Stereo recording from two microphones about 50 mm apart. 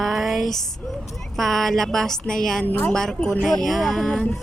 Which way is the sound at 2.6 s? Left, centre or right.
Left.